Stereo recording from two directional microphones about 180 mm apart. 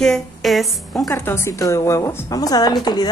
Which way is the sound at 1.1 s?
15° left (ahead or behind).